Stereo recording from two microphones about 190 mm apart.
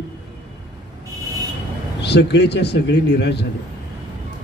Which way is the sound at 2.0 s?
65° left (ahead or behind).